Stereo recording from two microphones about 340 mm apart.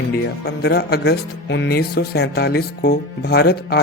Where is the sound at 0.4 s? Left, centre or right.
Left.